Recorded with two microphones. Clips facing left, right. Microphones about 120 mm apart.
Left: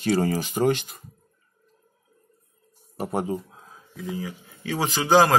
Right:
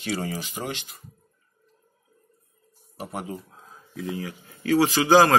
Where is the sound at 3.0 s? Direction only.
40° left (ahead or behind).